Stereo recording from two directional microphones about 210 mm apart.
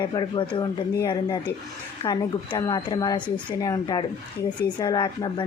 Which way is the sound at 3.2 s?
5° left (ahead or behind).